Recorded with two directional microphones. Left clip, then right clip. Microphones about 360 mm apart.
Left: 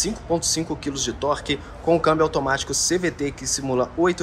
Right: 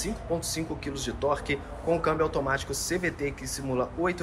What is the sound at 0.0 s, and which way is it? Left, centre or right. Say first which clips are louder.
Speech: left 8 dB; centre.